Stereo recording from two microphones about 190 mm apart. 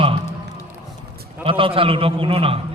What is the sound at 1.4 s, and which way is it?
A man's voice, 30° right (ahead or behind).